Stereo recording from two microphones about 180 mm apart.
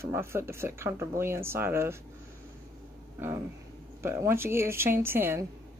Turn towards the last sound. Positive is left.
turn(degrees=-15)  # may be behind; listen again after turning